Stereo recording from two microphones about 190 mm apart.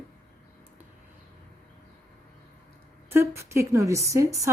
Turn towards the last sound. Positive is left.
turn(degrees=-15)  # may be behind; listen again after turning